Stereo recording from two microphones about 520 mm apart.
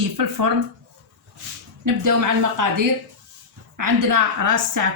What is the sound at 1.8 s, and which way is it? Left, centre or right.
Speech, right.